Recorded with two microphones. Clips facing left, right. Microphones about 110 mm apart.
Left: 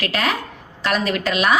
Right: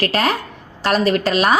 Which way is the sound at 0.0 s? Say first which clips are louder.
Right 4 dB; 35° right (ahead or behind).